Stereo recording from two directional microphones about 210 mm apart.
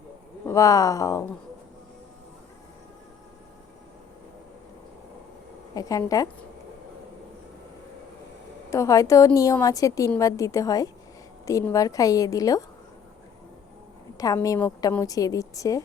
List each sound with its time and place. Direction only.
0.4 s a woman's voice: 15° left (ahead or behind)
5.7 s a woman's voice: 15° left (ahead or behind)
8.7 s a woman's voice: 15° left (ahead or behind)
14.2 s a woman's voice: 15° left (ahead or behind)